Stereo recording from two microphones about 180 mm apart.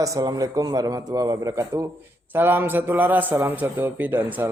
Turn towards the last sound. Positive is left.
turn(degrees=-10)  # may be behind; listen again after turning